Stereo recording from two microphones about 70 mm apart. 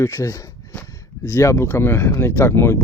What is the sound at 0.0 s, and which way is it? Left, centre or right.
Speech, left.